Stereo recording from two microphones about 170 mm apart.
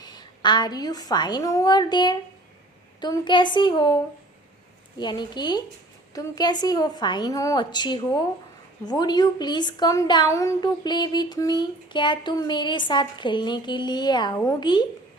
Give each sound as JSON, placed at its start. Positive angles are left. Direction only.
{"t": 0.0, "sound": "a woman's voice", "side_deg": 25}